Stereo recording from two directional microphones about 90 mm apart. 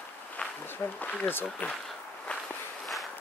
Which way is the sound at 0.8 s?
35° left (ahead or behind).